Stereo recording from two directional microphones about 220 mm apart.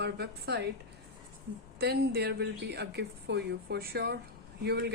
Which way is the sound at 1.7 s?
45° right (ahead or behind).